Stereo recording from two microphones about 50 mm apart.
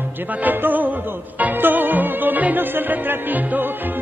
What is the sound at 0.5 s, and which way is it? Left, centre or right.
Music, right.